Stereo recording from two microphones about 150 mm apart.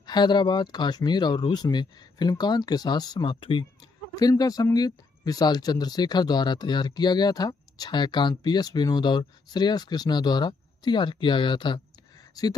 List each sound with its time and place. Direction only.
0.0 s speech: 30° left (ahead or behind)